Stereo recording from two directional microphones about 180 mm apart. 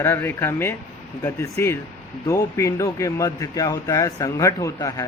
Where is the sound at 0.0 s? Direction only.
15° left (ahead or behind).